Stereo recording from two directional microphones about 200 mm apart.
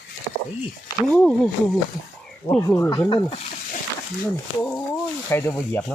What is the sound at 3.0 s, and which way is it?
Speech, 25° left (ahead or behind).